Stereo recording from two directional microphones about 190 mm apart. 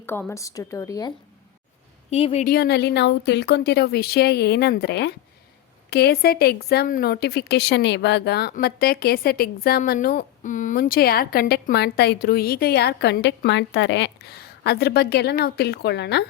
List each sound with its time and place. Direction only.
0.0 s a woman's voice: 10° left (ahead or behind)
2.0 s speech: 35° left (ahead or behind)
2.5 s a woman's voice: 60° left (ahead or behind)